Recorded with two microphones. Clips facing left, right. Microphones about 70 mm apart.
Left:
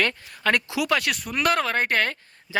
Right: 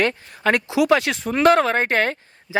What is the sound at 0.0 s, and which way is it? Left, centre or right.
Speech, right.